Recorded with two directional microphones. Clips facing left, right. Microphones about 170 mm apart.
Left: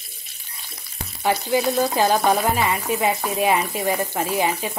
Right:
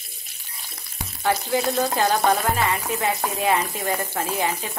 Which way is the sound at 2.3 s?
15° left (ahead or behind).